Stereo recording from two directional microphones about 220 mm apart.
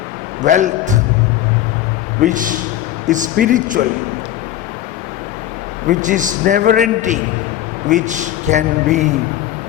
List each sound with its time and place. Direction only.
0.4 s a man's voice: 35° right (ahead or behind)
2.2 s a man's voice: 35° right (ahead or behind)
5.9 s a man's voice: 35° right (ahead or behind)